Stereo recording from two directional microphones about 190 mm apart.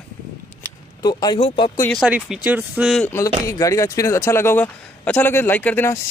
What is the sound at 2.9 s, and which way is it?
Speech, 10° left (ahead or behind).